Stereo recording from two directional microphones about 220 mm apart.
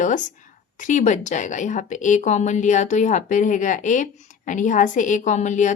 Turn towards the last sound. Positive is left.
turn(degrees=35)  # may be behind; listen again after turning